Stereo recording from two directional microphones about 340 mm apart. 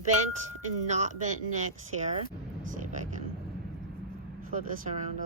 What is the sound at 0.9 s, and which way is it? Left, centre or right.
Speech, centre.